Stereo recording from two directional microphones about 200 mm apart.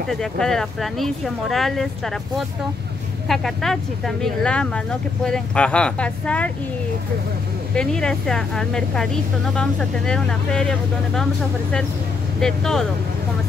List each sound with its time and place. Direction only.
0.1 s speech: centre (ahead or behind)
7.7 s speech: 5° left (ahead or behind)
12.4 s speech: centre (ahead or behind)